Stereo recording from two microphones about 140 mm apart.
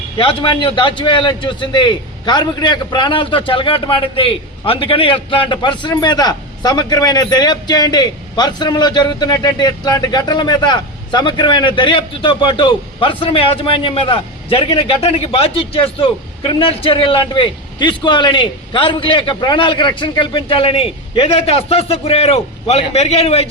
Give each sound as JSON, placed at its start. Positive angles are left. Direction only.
{"t": 0.2, "sound": "a man's voice", "side_deg": 35}